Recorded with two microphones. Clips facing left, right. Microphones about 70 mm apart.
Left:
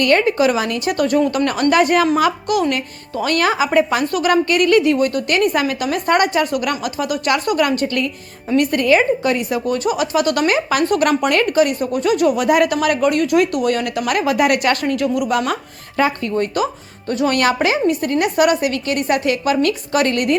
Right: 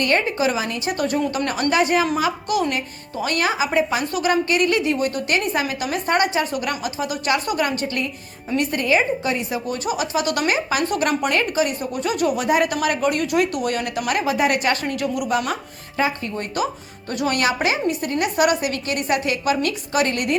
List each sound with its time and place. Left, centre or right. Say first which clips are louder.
0.0 s a woman's voice: left 5 dB; left
9.3 s a woman's voice: left 6 dB; left
14.9 s speech: left 4 dB; left